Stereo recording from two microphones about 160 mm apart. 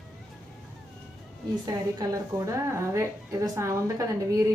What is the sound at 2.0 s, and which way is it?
A woman's voice, 20° right (ahead or behind).